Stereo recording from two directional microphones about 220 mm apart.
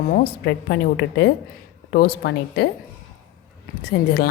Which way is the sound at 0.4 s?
55° left (ahead or behind).